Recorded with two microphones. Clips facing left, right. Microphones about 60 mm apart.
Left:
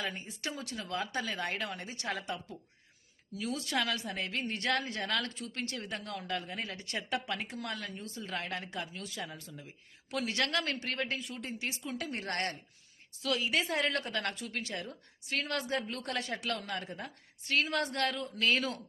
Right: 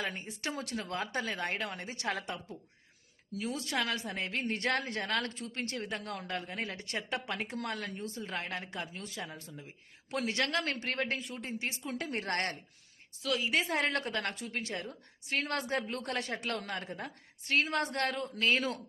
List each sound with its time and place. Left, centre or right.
0.0 s speech: right
0.4 s speech: right
2.0 s speech: right
3.4 s a woman's voice: right
3.8 s speech: right
4.4 s speech: right
7.3 s a woman's voice: right; by 9.6 s centre
9.6 s speech: right
11.3 s a woman's voice: right
11.9 s speech: right
13.5 s a woman's voice: right
18.4 s a woman's voice: right